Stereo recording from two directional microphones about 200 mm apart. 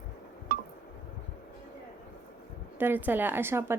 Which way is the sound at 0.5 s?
45° right (ahead or behind).